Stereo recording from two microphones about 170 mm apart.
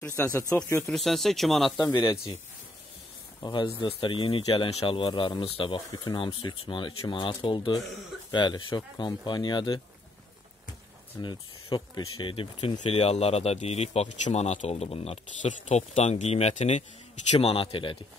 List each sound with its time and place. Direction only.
0.0 s speech: 15° left (ahead or behind)
0.9 s speech: centre (ahead or behind)
1.8 s speech: 25° left (ahead or behind)
3.4 s speech: 30° left (ahead or behind)
11.1 s speech: 25° left (ahead or behind)